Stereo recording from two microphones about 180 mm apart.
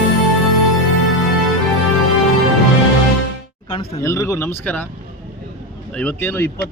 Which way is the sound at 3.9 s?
15° left (ahead or behind).